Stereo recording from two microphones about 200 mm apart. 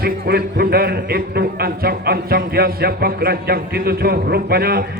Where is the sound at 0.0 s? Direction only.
50° right (ahead or behind).